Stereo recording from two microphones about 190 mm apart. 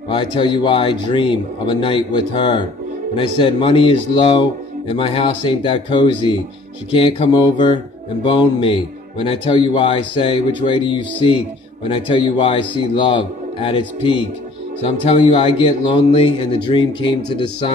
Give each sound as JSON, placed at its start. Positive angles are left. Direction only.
{"t": 0.1, "sound": "speech", "side_deg": 25}